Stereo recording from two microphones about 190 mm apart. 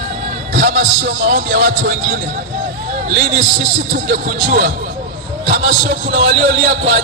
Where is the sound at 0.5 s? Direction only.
50° right (ahead or behind).